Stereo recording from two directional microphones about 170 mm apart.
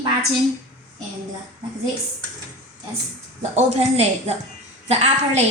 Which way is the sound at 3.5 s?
40° right (ahead or behind).